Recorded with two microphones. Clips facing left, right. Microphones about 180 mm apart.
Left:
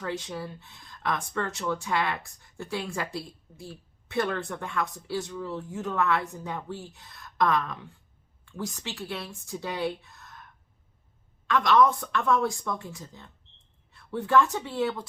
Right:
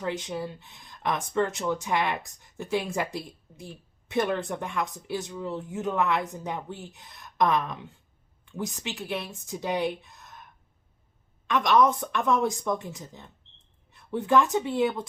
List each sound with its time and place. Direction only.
0.0 s speech: 20° right (ahead or behind)
11.4 s a woman's voice: 20° right (ahead or behind)